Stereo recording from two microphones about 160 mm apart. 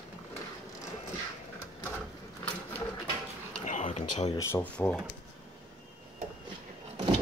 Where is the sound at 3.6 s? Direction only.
50° left (ahead or behind).